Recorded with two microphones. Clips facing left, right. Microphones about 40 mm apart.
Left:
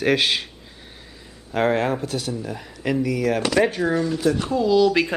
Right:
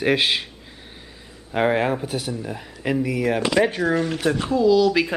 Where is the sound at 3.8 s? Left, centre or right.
Right.